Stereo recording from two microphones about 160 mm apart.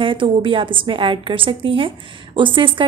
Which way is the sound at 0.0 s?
30° right (ahead or behind).